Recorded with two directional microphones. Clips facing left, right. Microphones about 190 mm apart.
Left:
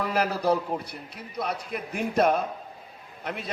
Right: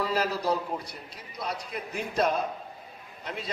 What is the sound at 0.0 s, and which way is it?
A man's voice, 55° left (ahead or behind).